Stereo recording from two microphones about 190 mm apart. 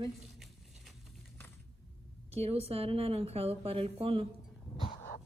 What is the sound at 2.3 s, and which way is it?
A woman's voice, 30° right (ahead or behind).